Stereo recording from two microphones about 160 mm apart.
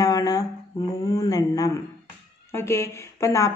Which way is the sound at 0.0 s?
20° left (ahead or behind).